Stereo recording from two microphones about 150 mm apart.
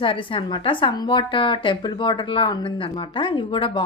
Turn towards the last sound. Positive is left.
turn(degrees=35)  # may be behind; listen again after turning